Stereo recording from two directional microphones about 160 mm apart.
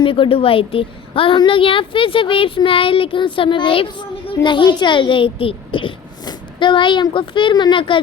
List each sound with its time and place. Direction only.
0.0 s a child's voice: 35° left (ahead or behind)